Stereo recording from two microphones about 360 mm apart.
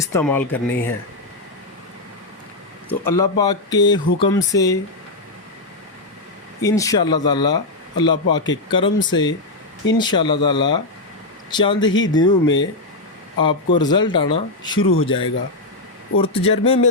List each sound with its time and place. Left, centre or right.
0.0 s speech: centre
3.1 s speech: centre
6.6 s speech: centre